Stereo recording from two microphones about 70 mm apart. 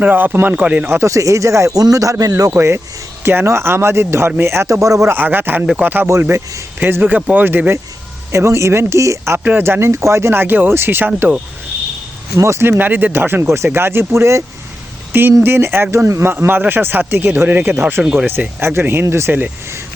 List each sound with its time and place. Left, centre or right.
0.0 s a man's voice: right
0.9 s speech: right
2.5 s speech: right
5.0 s a man's voice: right
8.3 s speech: right
9.4 s speech: right
12.4 s speech: right
18.0 s speech: centre
18.3 s speech: right